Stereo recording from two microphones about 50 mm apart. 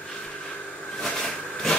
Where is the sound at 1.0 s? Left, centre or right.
Centre.